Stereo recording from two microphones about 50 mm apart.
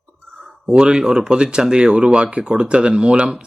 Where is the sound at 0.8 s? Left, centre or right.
Centre.